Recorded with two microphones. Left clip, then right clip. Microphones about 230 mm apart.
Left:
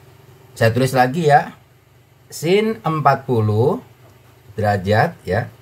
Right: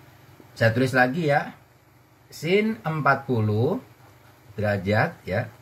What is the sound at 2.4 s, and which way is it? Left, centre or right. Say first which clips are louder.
Speech: left 6 dB; left.